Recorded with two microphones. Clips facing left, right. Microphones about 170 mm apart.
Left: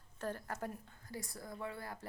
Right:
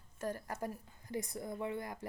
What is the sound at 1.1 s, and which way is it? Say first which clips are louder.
Speech: right 6 dB; 20° right (ahead or behind).